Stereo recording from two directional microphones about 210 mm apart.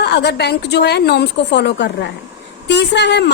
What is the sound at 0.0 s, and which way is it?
A woman's voice, 50° left (ahead or behind).